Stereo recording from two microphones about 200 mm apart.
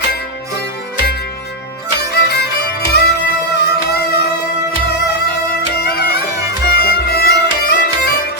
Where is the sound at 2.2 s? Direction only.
50° left (ahead or behind).